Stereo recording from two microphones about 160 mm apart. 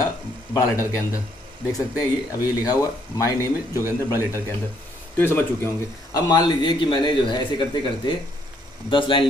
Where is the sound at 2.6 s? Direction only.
20° left (ahead or behind).